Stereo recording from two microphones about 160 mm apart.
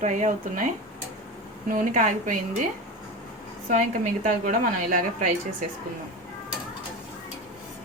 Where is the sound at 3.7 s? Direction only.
50° right (ahead or behind).